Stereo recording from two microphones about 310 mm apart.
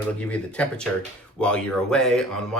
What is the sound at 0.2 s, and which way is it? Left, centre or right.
Speech, centre.